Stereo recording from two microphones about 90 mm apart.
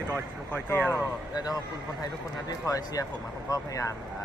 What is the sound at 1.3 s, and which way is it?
Speech, 50° left (ahead or behind).